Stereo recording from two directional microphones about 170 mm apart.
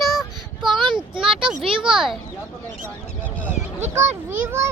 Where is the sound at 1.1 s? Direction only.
30° right (ahead or behind).